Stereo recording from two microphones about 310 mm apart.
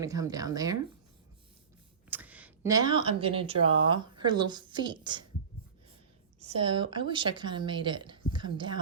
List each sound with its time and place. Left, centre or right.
0.0 s speech: centre
2.0 s speech: centre
6.4 s speech: centre